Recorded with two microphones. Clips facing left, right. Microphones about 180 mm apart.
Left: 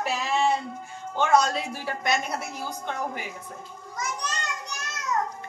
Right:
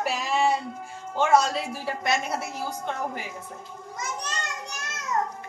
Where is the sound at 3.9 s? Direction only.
25° right (ahead or behind).